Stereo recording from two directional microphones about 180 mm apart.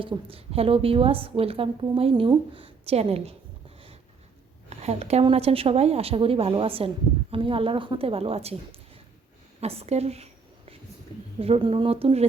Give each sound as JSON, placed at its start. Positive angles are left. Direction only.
{"t": 0.0, "sound": "a woman's voice", "side_deg": -30}
{"t": 4.7, "sound": "a woman's voice", "side_deg": -35}
{"t": 9.6, "sound": "a woman's voice", "side_deg": -35}
{"t": 11.3, "sound": "a woman's voice", "side_deg": -35}